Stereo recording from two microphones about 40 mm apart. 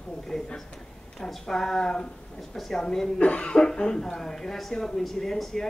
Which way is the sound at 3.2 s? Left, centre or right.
Left.